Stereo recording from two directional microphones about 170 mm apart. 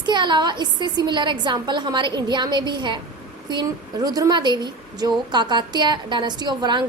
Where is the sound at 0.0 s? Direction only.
25° right (ahead or behind).